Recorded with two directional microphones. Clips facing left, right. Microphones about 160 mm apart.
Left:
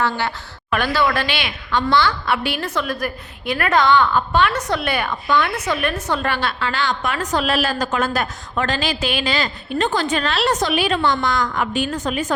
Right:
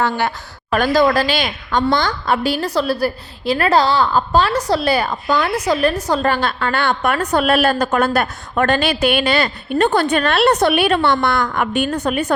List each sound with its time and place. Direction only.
0.7 s a woman's voice: 40° right (ahead or behind); by 12.3 s 65° right (ahead or behind)